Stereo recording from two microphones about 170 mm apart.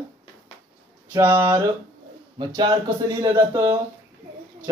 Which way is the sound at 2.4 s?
25° right (ahead or behind).